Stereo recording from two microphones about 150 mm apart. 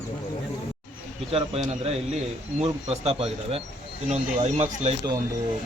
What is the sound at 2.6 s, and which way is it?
Speech, 45° right (ahead or behind).